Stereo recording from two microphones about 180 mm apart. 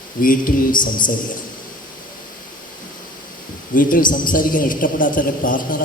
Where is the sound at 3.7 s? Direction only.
50° left (ahead or behind).